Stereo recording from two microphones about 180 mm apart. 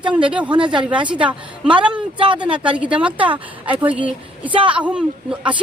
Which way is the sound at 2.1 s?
30° right (ahead or behind).